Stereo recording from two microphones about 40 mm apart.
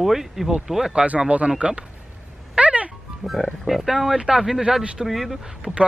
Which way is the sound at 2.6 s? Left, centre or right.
Right.